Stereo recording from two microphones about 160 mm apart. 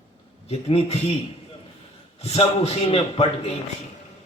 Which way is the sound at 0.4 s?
40° left (ahead or behind).